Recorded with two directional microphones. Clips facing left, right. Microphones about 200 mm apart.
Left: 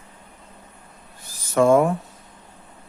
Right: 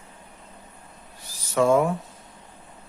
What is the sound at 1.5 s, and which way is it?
Speech, 50° left (ahead or behind).